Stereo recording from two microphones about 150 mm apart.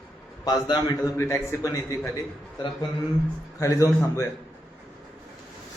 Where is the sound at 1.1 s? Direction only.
15° left (ahead or behind).